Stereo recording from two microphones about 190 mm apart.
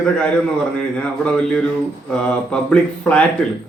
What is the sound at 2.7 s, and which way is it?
Speech, 5° left (ahead or behind).